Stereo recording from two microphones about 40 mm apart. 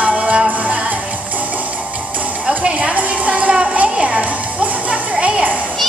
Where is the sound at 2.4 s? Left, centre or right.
Right.